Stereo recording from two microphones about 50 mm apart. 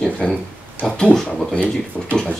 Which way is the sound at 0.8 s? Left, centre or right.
Centre.